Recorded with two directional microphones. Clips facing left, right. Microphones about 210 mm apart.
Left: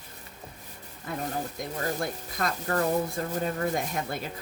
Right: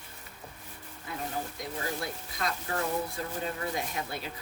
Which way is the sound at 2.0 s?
50° left (ahead or behind).